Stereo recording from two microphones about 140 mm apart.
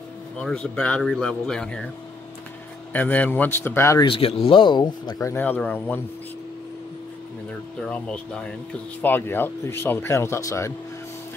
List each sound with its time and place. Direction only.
0.4 s speech: 5° left (ahead or behind)
2.9 s speech: 10° left (ahead or behind)
4.0 s speech: 40° left (ahead or behind)
5.3 s speech: 15° left (ahead or behind)
7.8 s speech: 5° left (ahead or behind)